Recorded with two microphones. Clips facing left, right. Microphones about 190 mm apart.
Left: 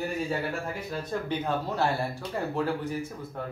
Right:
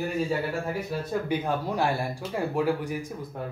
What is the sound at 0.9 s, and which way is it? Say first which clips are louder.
Speech: right 1 dB; 10° right (ahead or behind).